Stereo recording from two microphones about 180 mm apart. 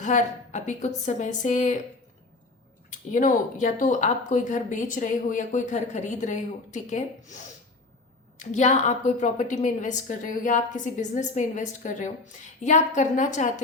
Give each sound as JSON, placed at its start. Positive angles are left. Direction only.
{"t": 0.0, "sound": "a woman's voice", "side_deg": 45}
{"t": 2.9, "sound": "a woman's voice", "side_deg": 45}